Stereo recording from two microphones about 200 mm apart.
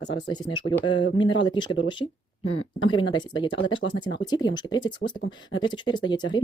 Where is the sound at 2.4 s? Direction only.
90° left.